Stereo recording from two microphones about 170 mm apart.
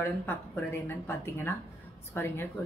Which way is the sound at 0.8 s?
15° left (ahead or behind).